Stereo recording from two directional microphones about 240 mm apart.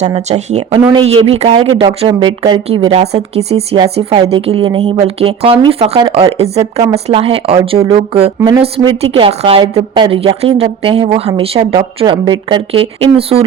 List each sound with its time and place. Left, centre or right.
0.0 s speech: right
8.4 s speech: centre
8.6 s speech: right